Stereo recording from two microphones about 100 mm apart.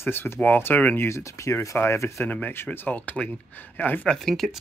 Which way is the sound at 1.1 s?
30° left (ahead or behind).